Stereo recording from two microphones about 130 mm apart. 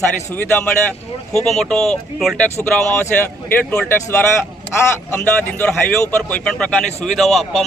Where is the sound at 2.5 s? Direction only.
15° left (ahead or behind).